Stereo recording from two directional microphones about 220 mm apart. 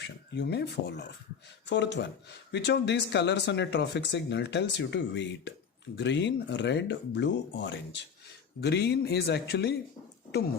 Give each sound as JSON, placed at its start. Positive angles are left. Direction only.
{"t": 0.0, "sound": "speech", "side_deg": 50}